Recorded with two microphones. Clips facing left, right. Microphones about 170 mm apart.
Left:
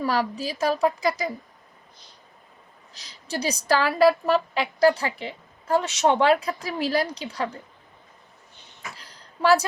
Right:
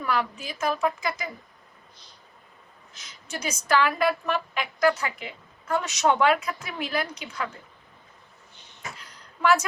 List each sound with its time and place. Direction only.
0.0 s a woman's voice: 35° left (ahead or behind)
2.9 s a woman's voice: 35° left (ahead or behind)
9.0 s a sound: 30° left (ahead or behind)